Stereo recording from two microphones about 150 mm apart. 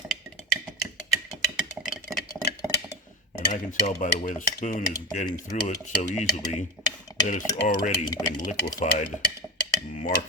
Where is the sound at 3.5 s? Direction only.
55° left (ahead or behind).